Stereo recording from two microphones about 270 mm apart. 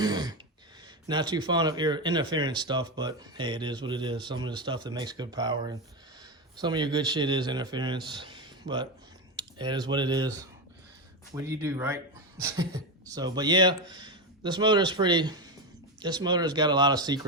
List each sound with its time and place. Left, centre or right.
0.0 s speech: centre
11.4 s speech: centre